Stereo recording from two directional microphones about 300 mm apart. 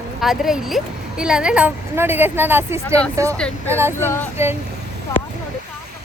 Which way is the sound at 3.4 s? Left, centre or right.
Centre.